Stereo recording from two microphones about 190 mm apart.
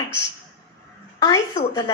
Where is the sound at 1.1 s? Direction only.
20° left (ahead or behind).